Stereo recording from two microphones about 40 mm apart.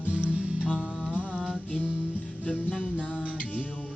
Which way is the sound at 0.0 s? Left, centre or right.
Right.